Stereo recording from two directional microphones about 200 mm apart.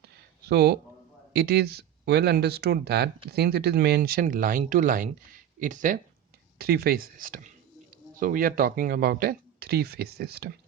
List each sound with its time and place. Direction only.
0.0 s a sound: 55° right (ahead or behind)
1.3 s speech: 50° right (ahead or behind)
6.6 s speech: 50° right (ahead or behind)